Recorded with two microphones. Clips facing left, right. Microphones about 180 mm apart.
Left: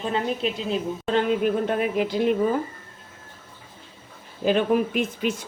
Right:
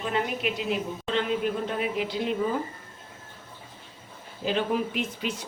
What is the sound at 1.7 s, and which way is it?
Speech, 50° left (ahead or behind).